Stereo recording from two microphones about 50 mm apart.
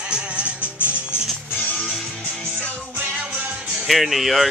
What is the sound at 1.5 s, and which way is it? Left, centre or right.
Music, left.